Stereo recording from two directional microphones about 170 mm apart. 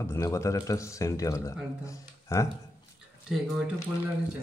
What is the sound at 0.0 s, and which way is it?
Speech, 15° left (ahead or behind).